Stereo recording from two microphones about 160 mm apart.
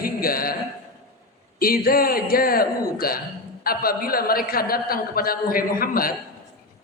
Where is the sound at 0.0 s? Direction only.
65° left (ahead or behind).